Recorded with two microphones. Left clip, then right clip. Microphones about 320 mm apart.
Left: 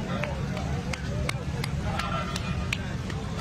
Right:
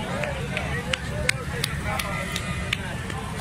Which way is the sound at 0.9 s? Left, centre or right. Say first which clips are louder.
Right 7 dB; left.